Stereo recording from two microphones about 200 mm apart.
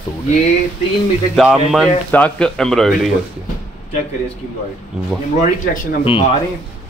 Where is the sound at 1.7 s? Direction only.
5° left (ahead or behind).